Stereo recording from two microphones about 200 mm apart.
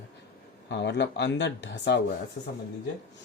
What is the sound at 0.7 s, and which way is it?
Speech, 60° left (ahead or behind).